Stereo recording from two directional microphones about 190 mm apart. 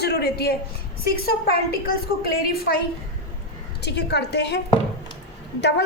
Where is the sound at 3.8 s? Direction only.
60° left (ahead or behind).